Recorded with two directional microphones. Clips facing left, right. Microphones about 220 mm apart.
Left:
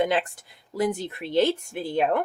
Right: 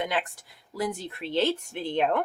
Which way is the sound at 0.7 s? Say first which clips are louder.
Left 5 dB; 20° left (ahead or behind).